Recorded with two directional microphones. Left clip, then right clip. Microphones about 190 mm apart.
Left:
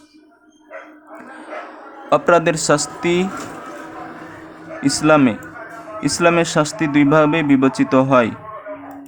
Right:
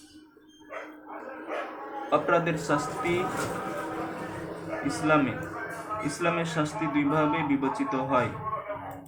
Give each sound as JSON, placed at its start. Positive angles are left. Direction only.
{"t": 2.0, "sound": "speech", "side_deg": 60}
{"t": 4.9, "sound": "speech", "side_deg": 60}